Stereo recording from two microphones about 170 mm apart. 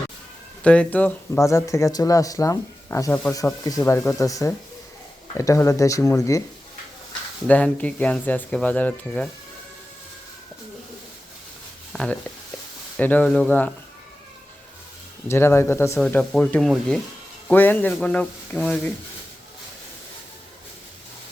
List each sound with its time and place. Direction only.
0.6 s speech: 5° left (ahead or behind)
7.4 s speech: 10° left (ahead or behind)
11.9 s speech: centre (ahead or behind)
15.3 s speech: 15° left (ahead or behind)
16.0 s speech: 5° left (ahead or behind)